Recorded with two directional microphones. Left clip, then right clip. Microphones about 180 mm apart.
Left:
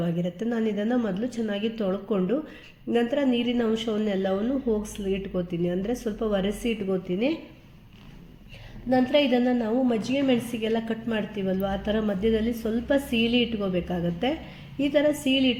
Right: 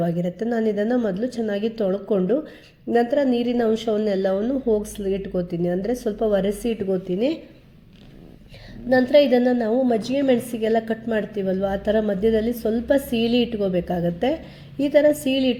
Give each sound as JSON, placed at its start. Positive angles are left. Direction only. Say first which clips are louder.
{"t": 0.0, "sound": "a woman's voice", "louder": "right 5 dB", "side_deg": -35}
{"t": 8.9, "sound": "a woman's voice", "louder": "right 6 dB", "side_deg": -30}